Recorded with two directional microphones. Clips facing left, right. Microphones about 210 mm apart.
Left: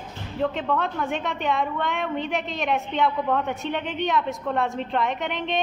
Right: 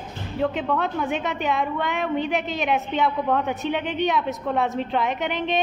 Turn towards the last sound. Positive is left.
turn(degrees=0)  # may be behind; listen again after turning